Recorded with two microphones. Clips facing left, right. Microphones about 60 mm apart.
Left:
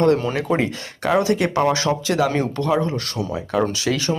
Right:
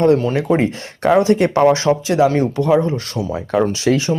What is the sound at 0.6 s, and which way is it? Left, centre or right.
Speech, right.